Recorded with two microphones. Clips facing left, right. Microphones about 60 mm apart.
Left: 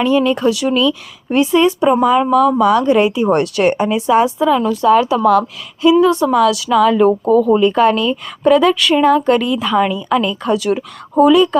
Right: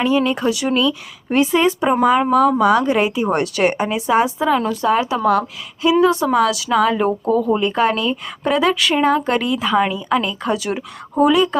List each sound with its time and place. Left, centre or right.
0.0 s speech: right
2.6 s a woman's voice: right
4.4 s a woman's voice: right
7.1 s speech: left
7.5 s a woman's voice: right
9.6 s a woman's voice: centre